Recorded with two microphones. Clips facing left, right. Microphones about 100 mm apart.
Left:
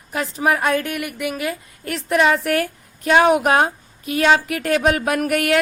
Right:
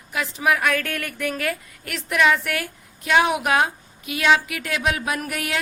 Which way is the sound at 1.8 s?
35° left (ahead or behind).